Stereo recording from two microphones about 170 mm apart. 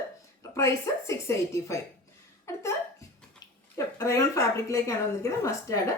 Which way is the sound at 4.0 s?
20° left (ahead or behind).